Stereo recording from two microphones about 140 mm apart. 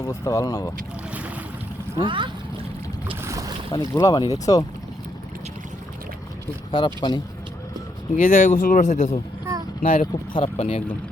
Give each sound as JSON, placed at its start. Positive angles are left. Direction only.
{"t": 0.0, "sound": "speech", "side_deg": 25}
{"t": 2.0, "sound": "speech", "side_deg": -35}
{"t": 3.2, "sound": "boat", "side_deg": -20}
{"t": 3.7, "sound": "speech", "side_deg": 25}
{"t": 6.7, "sound": "speech", "side_deg": 35}
{"t": 8.1, "sound": "speech", "side_deg": 75}
{"t": 9.8, "sound": "speech", "side_deg": 90}
{"t": 10.3, "sound": "speech", "side_deg": 45}